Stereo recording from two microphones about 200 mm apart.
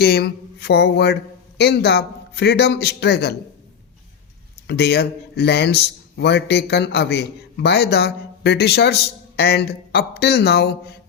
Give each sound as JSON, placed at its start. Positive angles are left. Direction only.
{"t": 0.0, "sound": "a man's voice", "side_deg": 50}
{"t": 4.6, "sound": "a man's voice", "side_deg": 55}